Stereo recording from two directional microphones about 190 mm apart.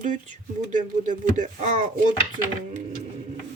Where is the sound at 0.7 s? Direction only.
40° right (ahead or behind).